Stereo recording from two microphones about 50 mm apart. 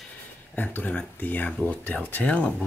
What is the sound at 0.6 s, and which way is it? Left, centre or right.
Speech, left.